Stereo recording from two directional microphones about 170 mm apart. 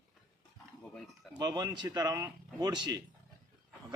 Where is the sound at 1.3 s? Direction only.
25° right (ahead or behind).